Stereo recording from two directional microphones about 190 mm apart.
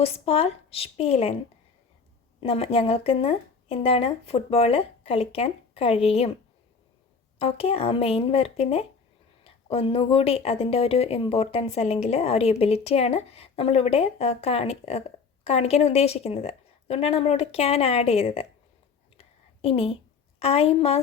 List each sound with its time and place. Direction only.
0.0 s speech: 30° left (ahead or behind)
2.4 s speech: 30° left (ahead or behind)
7.3 s speech: 30° left (ahead or behind)
19.6 s a woman's voice: 30° left (ahead or behind)